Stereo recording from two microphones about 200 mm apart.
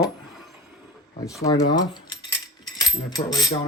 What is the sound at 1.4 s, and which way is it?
Cutlery, 15° left (ahead or behind).